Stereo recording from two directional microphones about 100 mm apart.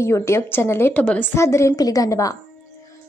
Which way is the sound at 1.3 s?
30° left (ahead or behind).